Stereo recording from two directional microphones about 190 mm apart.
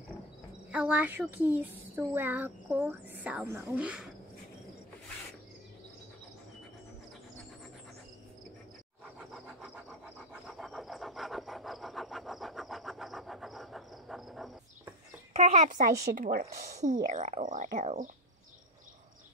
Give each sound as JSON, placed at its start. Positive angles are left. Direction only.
{"t": 0.7, "sound": "a woman's voice", "side_deg": -5}
{"t": 9.0, "sound": "a sound", "side_deg": -5}
{"t": 15.3, "sound": "speech", "side_deg": -40}